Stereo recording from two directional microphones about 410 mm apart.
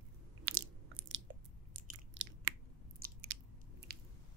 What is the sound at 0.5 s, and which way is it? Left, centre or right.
Biting, right.